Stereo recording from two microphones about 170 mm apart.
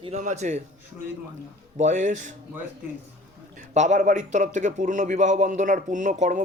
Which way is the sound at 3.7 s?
45° right (ahead or behind).